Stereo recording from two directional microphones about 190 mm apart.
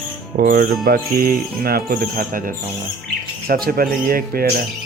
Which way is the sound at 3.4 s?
50° right (ahead or behind).